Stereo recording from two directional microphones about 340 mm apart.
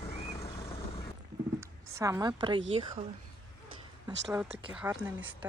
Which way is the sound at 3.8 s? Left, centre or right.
Centre.